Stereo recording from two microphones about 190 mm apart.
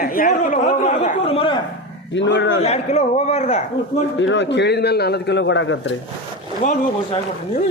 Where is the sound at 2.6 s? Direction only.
35° left (ahead or behind).